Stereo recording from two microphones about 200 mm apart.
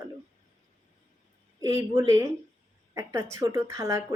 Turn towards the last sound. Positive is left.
turn(degrees=-15)  # may be behind; listen again after turning